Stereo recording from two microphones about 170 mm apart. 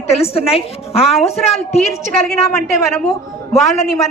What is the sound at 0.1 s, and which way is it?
Speech, 35° left (ahead or behind).